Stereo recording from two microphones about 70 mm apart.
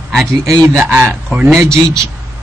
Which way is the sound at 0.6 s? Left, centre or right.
Right.